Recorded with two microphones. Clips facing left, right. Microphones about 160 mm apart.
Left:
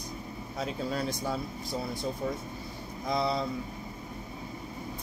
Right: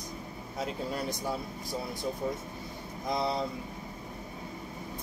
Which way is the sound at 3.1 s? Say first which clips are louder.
Left 1 dB; 20° right (ahead or behind).